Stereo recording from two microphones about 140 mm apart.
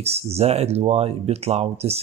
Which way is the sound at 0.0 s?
45° right (ahead or behind).